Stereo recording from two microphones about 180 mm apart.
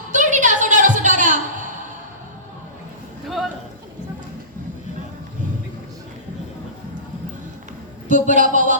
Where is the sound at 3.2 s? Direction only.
Centre (ahead or behind).